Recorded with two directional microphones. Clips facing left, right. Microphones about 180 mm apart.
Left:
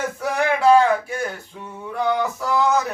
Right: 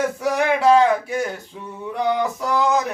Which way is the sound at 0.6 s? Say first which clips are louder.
Left 1 dB; 15° right (ahead or behind).